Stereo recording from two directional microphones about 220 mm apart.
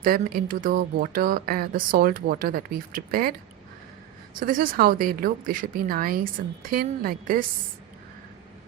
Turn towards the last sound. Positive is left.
turn(degrees=-40)  # may be behind; listen again after turning